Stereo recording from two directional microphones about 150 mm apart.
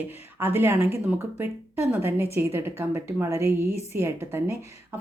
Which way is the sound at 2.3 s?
15° right (ahead or behind).